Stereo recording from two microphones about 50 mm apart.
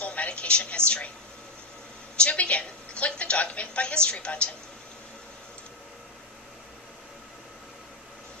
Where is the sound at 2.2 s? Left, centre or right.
Left.